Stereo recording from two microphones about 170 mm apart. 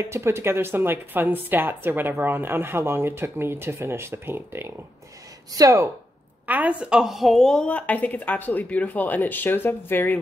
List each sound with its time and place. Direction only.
0.0 s speech: 15° right (ahead or behind)
6.4 s speech: 10° right (ahead or behind); by 10.1 s 15° left (ahead or behind)